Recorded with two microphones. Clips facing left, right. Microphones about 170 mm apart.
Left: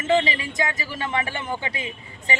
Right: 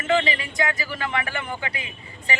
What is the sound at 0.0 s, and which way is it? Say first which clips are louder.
Speech: left 1 dB; 25° left (ahead or behind).